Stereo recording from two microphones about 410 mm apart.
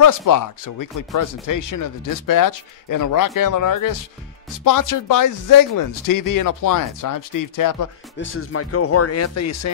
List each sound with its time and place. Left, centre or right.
0.0 s speech: left
8.2 s speech: left